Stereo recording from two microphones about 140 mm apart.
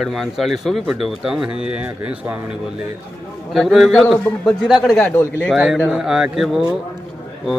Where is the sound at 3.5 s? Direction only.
Centre (ahead or behind).